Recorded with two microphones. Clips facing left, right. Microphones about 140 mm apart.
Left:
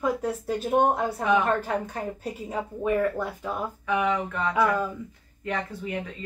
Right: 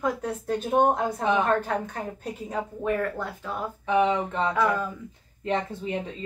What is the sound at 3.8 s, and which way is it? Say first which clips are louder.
Speech: right 3 dB; 25° right (ahead or behind).